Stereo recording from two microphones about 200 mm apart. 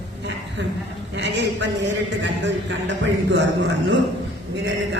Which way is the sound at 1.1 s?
60° right (ahead or behind).